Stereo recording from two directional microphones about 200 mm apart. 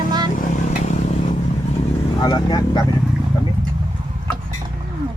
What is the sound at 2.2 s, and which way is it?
Speech, 20° left (ahead or behind).